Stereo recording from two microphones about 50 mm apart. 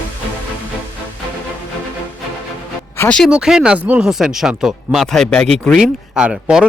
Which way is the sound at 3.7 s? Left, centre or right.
Right.